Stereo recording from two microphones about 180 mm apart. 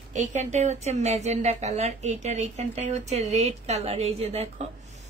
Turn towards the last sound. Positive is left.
turn(degrees=-35)  # may be behind; listen again after turning